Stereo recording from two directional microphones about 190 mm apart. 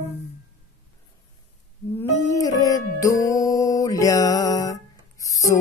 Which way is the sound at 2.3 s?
20° left (ahead or behind).